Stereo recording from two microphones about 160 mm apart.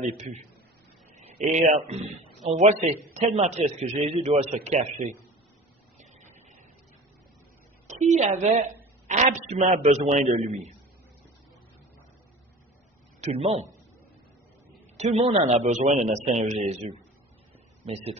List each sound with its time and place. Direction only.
1.1 s a man's voice: 45° right (ahead or behind)
7.8 s a woman's voice: 45° right (ahead or behind)
13.2 s speech: 40° right (ahead or behind)
15.0 s a man's voice: 40° right (ahead or behind)